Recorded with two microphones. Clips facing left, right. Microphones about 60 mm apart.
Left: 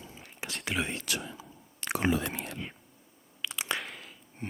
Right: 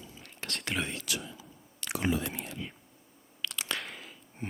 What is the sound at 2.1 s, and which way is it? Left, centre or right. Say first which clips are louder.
Whispering: left 2 dB; left.